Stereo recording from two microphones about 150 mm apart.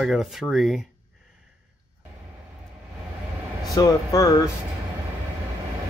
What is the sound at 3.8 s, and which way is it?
Speech, 25° left (ahead or behind).